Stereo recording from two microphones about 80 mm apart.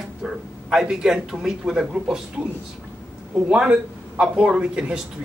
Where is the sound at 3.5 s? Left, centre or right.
Centre.